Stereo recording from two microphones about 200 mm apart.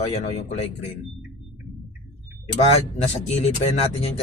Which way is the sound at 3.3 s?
30° left (ahead or behind).